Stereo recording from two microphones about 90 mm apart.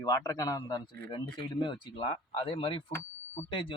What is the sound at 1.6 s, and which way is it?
Speech, 60° left (ahead or behind).